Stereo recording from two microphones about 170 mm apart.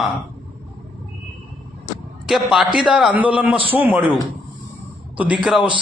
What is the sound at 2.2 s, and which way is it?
A man's voice, centre (ahead or behind).